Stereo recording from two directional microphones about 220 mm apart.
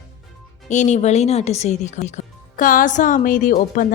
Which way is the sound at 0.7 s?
35° left (ahead or behind).